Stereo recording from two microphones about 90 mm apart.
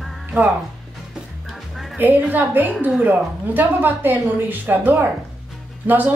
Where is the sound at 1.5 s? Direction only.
Centre (ahead or behind).